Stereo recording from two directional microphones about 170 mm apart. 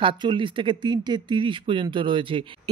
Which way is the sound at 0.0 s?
30° right (ahead or behind).